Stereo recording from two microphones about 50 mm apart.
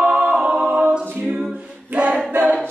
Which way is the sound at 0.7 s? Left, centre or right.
Centre.